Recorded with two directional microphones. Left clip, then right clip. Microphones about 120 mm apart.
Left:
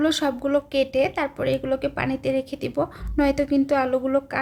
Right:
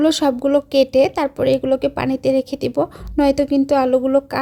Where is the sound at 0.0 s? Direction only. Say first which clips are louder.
Right 6 dB; 50° right (ahead or behind).